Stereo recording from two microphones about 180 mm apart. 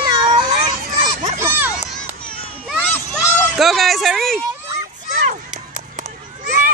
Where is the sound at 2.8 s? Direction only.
10° left (ahead or behind).